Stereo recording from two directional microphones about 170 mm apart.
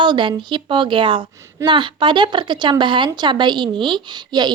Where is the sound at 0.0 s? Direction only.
30° right (ahead or behind).